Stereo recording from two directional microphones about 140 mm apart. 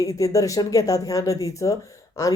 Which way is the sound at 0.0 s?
25° left (ahead or behind).